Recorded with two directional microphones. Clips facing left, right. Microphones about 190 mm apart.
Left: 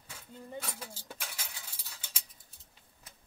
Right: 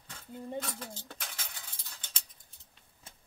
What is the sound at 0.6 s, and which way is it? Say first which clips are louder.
Cutlery: right 4 dB; 10° left (ahead or behind).